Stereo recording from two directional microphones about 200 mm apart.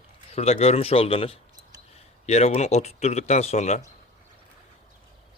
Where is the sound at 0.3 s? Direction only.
30° left (ahead or behind).